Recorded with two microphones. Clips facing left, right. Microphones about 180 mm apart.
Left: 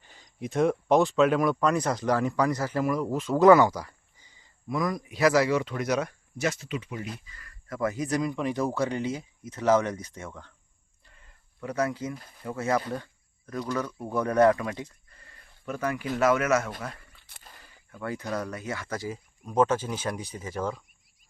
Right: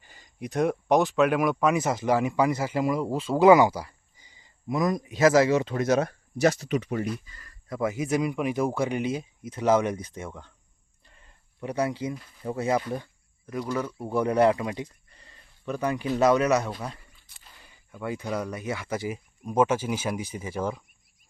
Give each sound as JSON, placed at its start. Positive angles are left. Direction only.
{"t": 0.0, "sound": "a sound", "side_deg": 0}
{"t": 0.9, "sound": "speech", "side_deg": 0}
{"t": 7.7, "sound": "speech", "side_deg": -10}
{"t": 11.6, "sound": "speech", "side_deg": -15}
{"t": 17.9, "sound": "speech", "side_deg": -15}